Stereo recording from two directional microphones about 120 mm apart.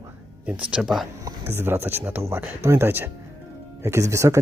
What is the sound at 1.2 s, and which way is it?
Speech, 20° right (ahead or behind).